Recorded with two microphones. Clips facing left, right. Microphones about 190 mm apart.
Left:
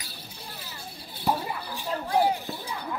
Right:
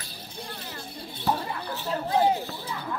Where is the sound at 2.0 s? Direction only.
20° right (ahead or behind).